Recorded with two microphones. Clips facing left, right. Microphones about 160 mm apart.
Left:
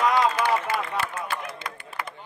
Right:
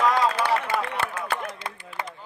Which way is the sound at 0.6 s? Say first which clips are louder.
Right 1 dB; 60° right (ahead or behind).